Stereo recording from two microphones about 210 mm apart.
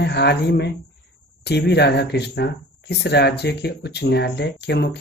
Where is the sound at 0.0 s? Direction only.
55° left (ahead or behind).